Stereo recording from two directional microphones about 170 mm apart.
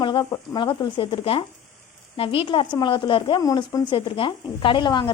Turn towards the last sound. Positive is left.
turn(degrees=25)  # may be behind; listen again after turning